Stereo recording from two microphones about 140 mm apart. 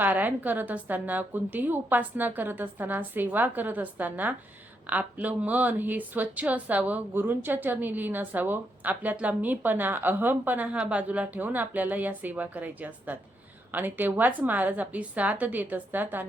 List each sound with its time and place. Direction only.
0.0 s a woman's voice: 15° right (ahead or behind)